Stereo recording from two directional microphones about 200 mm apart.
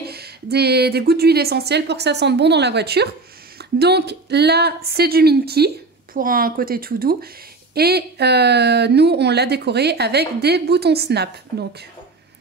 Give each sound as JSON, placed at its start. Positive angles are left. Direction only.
{"t": 0.0, "sound": "a woman's voice", "side_deg": -50}